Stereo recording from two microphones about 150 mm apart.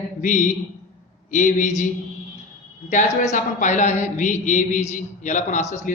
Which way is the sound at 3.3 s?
55° left (ahead or behind).